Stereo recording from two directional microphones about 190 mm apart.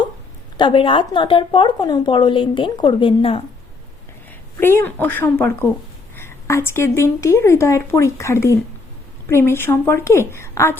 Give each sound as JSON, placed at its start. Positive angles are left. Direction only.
{"t": 0.5, "sound": "speech", "side_deg": 25}
{"t": 4.5, "sound": "a woman's voice", "side_deg": 15}